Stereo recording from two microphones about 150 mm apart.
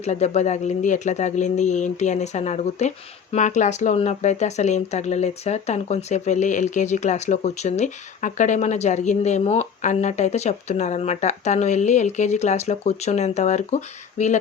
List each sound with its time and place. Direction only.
0.0 s speech: 50° left (ahead or behind)